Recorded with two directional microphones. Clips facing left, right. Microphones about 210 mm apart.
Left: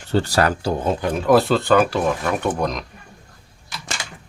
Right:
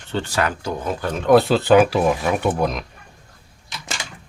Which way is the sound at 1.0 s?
10° left (ahead or behind).